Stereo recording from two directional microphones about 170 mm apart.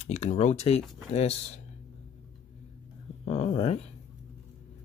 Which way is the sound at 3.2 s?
35° left (ahead or behind).